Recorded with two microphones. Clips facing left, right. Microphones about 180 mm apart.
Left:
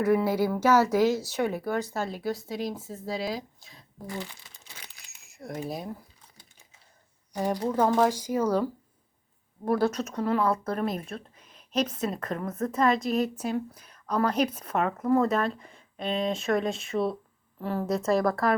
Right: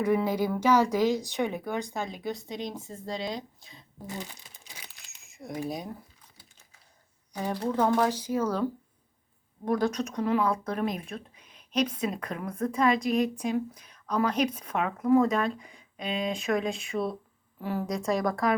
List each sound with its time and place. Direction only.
0.0 s speech: 5° left (ahead or behind)
4.0 s speech: 20° right (ahead or behind)
4.9 s a sound: centre (ahead or behind)
7.3 s speech: 10° left (ahead or behind)
9.6 s speech: 5° left (ahead or behind)